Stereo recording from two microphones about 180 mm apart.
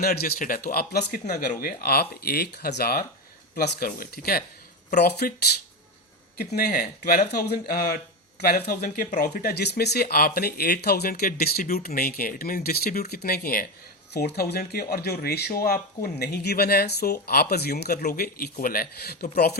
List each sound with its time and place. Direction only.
0.0 s speech: 55° left (ahead or behind)
6.6 s speech: 55° left (ahead or behind)